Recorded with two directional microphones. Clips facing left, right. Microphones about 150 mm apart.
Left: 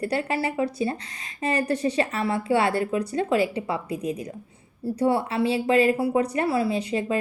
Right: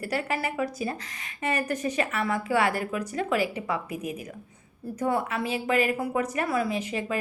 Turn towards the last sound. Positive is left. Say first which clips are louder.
# left 4 dB
turn(degrees=30)  # may be behind; listen again after turning